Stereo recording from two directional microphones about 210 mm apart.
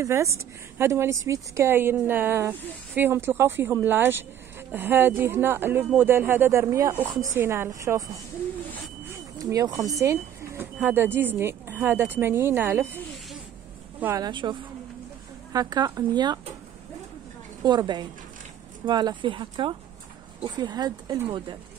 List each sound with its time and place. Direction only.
0.0 s a woman's voice: 15° right (ahead or behind)
9.4 s a woman's voice: 15° right (ahead or behind)
17.6 s speech: 20° right (ahead or behind)